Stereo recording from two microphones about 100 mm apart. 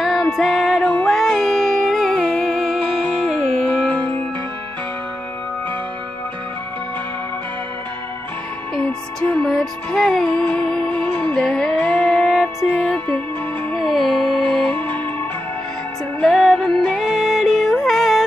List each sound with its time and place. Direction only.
0.0 s music: 5° left (ahead or behind)
8.7 s music: 15° left (ahead or behind)
16.2 s music: 5° left (ahead or behind)